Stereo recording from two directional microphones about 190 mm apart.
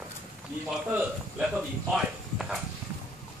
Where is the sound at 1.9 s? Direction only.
5° right (ahead or behind).